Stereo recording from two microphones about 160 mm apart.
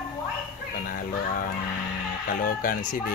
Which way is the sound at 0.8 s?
60° left (ahead or behind).